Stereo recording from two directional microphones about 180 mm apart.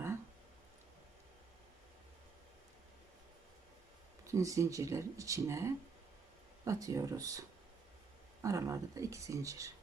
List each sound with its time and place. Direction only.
4.2 s speech: 15° right (ahead or behind)